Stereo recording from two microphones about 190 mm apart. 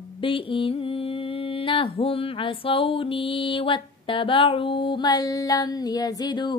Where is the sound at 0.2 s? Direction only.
30° left (ahead or behind).